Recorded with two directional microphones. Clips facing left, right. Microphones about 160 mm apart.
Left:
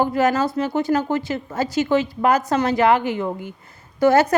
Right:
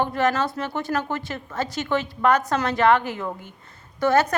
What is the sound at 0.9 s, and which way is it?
Speech, 30° left (ahead or behind).